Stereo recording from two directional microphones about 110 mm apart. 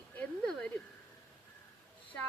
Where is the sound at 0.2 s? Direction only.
10° left (ahead or behind).